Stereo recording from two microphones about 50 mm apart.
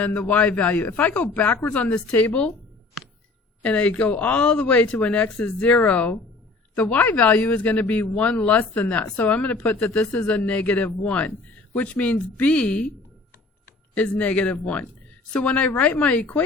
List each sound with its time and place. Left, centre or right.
0.0 s speech: left
3.6 s speech: left
5.9 s speech: left
13.9 s speech: left